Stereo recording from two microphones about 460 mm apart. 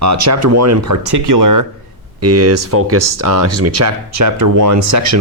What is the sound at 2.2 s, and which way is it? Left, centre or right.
Speech, right.